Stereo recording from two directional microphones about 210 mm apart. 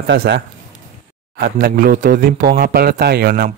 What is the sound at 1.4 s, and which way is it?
Speech, 45° right (ahead or behind).